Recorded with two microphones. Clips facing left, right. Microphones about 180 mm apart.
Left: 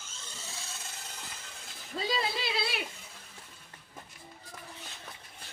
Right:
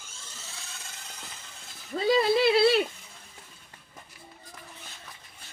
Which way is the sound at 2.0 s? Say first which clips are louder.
Right 12 dB; 60° right (ahead or behind).